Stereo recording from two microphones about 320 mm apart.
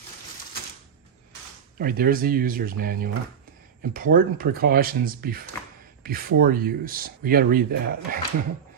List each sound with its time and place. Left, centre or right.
1.8 s speech: right